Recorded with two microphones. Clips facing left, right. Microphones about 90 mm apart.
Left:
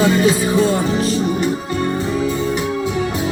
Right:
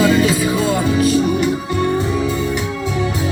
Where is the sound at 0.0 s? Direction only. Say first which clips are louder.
Even; 30° left (ahead or behind).